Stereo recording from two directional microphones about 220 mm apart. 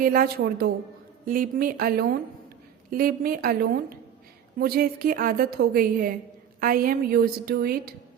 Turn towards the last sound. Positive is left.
turn(degrees=-45)  # may be behind; listen again after turning